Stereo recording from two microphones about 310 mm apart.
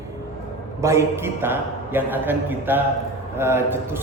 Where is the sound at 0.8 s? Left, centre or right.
Centre.